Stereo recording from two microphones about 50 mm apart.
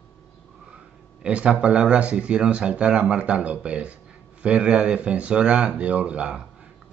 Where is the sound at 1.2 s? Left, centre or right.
Right.